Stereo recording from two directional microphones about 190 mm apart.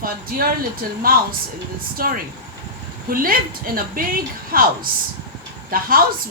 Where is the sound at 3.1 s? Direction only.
50° right (ahead or behind).